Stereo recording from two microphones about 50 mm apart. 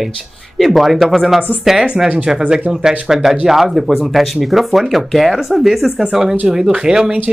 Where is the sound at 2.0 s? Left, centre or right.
Right.